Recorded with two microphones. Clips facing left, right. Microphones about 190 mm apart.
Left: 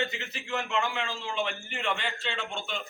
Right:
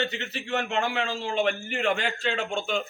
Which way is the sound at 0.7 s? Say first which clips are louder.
Right 3 dB; 40° right (ahead or behind).